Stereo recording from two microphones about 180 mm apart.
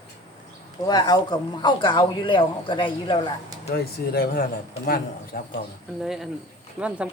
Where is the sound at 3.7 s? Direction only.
55° left (ahead or behind).